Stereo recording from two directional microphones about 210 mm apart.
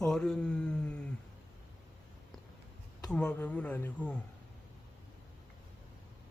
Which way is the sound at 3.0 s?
5° left (ahead or behind).